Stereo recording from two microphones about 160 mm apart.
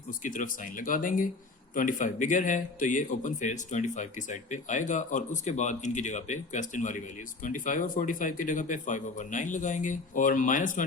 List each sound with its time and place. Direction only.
0.2 s a man's voice: 55° left (ahead or behind)